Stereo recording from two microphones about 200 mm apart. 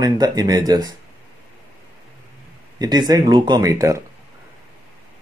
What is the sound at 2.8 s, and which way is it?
Speech, 20° right (ahead or behind).